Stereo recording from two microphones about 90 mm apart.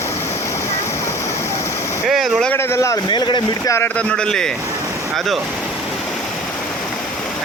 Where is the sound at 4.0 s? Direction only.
10° left (ahead or behind).